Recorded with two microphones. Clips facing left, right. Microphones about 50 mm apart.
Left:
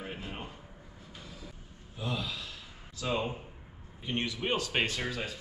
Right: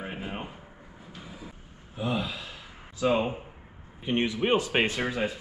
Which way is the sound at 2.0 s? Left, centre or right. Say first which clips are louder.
Right 6 dB; right.